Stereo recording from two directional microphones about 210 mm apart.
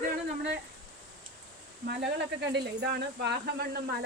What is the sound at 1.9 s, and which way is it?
Speech, 50° right (ahead or behind).